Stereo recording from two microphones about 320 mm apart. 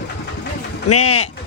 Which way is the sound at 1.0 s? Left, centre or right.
Centre.